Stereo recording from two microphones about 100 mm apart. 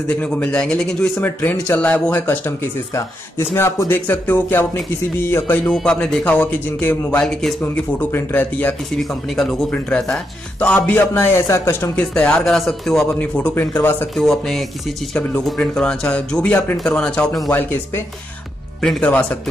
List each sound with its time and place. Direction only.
0.1 s speech: 10° left (ahead or behind)
1.2 s speech: 20° left (ahead or behind)
5.7 s speech: 10° left (ahead or behind)
6.2 s speech: 20° left (ahead or behind)
8.9 s speech: 5° left (ahead or behind); by 11.9 s 25° left (ahead or behind)
11.9 s speech: 10° left (ahead or behind)
13.1 s speech: 20° left (ahead or behind)
14.1 s speech: centre (ahead or behind)
17.5 s speech: 20° left (ahead or behind)
18.8 s speech: 5° left (ahead or behind)